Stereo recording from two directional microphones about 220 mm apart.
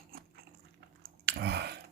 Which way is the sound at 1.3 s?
50° right (ahead or behind).